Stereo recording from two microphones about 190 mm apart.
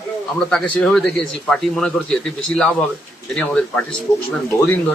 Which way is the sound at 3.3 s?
5° left (ahead or behind).